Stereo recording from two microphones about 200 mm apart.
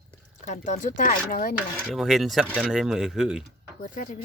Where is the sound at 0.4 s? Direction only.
35° left (ahead or behind).